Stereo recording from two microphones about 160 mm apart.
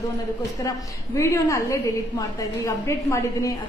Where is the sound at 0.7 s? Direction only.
20° left (ahead or behind).